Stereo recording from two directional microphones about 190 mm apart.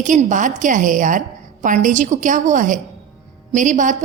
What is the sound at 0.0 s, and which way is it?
A woman's voice, 40° right (ahead or behind).